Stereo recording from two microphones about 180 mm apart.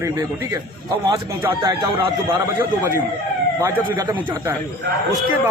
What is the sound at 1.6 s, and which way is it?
Speech, 25° right (ahead or behind).